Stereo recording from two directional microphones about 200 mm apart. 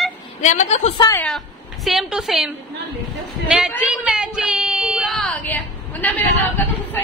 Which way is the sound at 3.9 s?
5° right (ahead or behind).